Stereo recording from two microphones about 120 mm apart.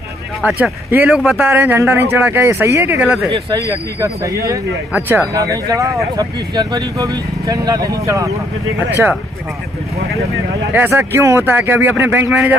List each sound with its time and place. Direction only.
0.6 s speech: 15° right (ahead or behind)
3.3 s speech: 35° right (ahead or behind)
10.7 s speech: 15° right (ahead or behind)